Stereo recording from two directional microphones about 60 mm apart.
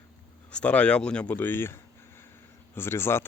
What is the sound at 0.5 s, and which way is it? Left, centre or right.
Speech, left.